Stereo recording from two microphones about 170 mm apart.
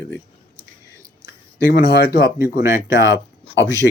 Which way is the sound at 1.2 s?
75° left (ahead or behind).